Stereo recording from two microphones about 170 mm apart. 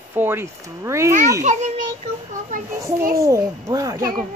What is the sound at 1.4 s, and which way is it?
Speech, 45° right (ahead or behind).